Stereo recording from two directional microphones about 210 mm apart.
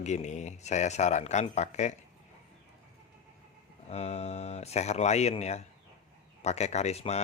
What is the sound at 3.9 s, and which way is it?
Speech, 30° left (ahead or behind).